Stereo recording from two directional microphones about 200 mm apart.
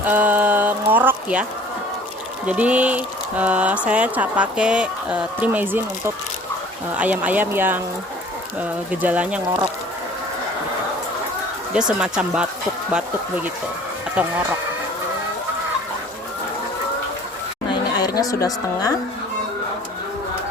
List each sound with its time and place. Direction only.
0.0 s a sound: 10° right (ahead or behind)
2.5 s speech: 5° right (ahead or behind)
6.9 s speech: 5° right (ahead or behind)
8.9 s speech: 5° right (ahead or behind)
11.7 s speech: 5° right (ahead or behind)
17.7 s a sound: 20° left (ahead or behind)